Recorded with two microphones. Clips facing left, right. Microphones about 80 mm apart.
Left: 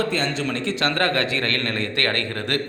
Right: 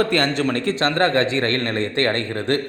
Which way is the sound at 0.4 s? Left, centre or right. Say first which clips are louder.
Right 4 dB; right.